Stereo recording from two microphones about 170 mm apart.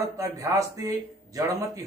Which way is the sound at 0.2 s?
20° right (ahead or behind).